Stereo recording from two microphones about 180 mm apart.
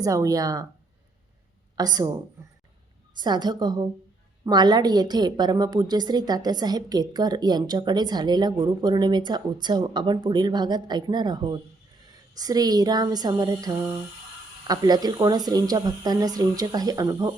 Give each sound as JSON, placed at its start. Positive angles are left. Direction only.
{"t": 0.0, "sound": "a woman's voice", "side_deg": -20}
{"t": 1.7, "sound": "a woman's voice", "side_deg": -20}
{"t": 3.2, "sound": "a woman's voice", "side_deg": -25}